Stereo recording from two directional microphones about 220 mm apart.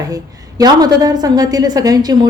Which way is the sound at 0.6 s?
15° right (ahead or behind).